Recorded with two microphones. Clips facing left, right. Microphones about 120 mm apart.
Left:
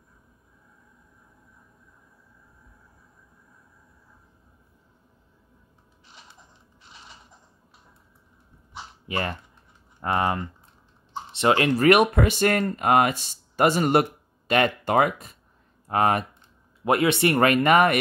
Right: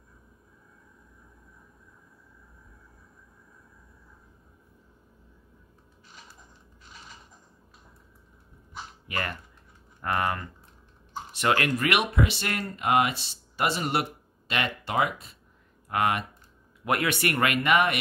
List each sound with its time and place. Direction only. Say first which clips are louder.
9.0 s speech: left 5 dB; 25° left (ahead or behind)
11.8 s speech: left 8 dB; 45° left (ahead or behind)
15.9 s speech: left 4 dB; 35° left (ahead or behind)
16.8 s speech: left 6 dB; 25° left (ahead or behind)
17.4 s speech: left 5 dB; 40° left (ahead or behind)